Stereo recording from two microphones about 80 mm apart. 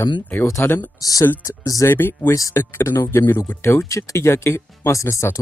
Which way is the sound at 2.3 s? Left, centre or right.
Left.